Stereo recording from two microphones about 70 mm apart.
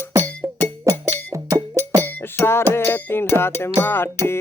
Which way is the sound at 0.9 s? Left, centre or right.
Right.